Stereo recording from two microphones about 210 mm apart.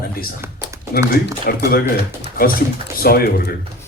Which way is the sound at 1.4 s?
45° left (ahead or behind).